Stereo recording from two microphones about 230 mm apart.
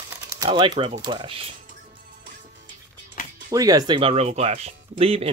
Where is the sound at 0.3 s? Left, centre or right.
Centre.